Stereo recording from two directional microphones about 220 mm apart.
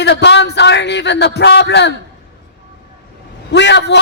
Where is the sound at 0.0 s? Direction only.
50° left (ahead or behind).